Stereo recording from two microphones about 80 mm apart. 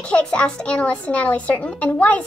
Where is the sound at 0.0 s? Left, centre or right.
Centre.